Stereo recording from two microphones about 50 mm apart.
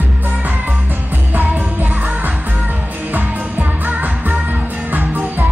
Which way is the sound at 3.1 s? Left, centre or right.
Right.